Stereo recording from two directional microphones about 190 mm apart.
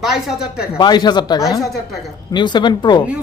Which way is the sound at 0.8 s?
20° left (ahead or behind).